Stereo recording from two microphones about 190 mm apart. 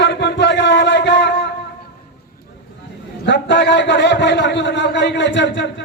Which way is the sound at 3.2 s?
70° left (ahead or behind).